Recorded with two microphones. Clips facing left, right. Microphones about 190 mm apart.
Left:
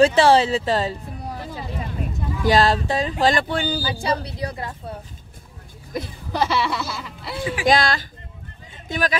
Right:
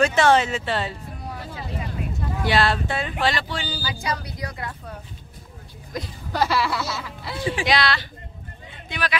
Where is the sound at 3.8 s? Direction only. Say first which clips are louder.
Left 5 dB; 35° left (ahead or behind).